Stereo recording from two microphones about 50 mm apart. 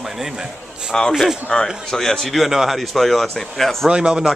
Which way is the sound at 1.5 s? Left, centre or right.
Left.